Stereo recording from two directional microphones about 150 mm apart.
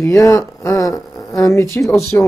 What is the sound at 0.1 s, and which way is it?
Speech, 20° left (ahead or behind).